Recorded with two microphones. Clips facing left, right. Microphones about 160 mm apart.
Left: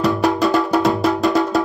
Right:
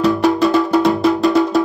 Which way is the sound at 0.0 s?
Centre (ahead or behind).